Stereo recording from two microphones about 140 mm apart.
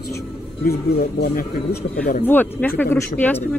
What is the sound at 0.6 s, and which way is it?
Speech, 90° left.